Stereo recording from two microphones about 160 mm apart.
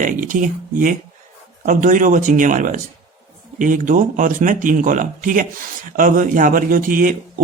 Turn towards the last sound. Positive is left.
turn(degrees=-60)  # may be behind; listen again after turning